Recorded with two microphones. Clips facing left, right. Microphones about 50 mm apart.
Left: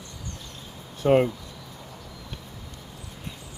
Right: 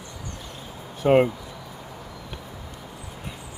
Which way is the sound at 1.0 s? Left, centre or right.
Centre.